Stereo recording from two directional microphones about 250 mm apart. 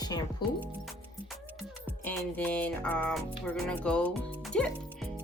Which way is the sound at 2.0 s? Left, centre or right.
Centre.